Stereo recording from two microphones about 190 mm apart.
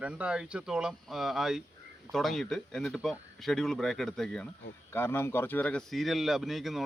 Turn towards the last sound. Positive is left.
turn(degrees=0)  # may be behind; listen again after turning